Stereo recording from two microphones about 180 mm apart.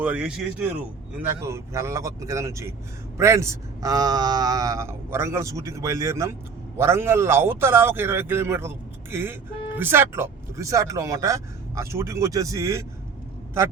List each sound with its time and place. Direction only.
0.0 s a man's voice: 5° right (ahead or behind)